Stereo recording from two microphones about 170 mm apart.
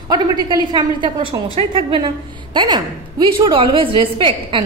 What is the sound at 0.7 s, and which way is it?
A woman's voice, 25° right (ahead or behind).